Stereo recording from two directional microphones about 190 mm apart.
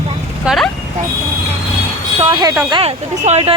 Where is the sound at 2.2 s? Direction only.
25° right (ahead or behind).